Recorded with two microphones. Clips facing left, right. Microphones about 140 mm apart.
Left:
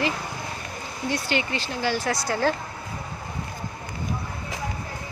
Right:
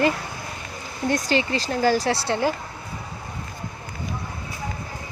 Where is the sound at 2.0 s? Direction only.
30° right (ahead or behind).